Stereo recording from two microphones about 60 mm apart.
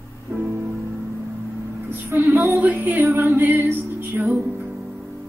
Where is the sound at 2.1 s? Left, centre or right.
Right.